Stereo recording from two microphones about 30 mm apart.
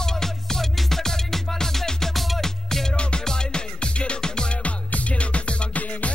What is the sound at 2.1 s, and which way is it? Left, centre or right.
Music, centre.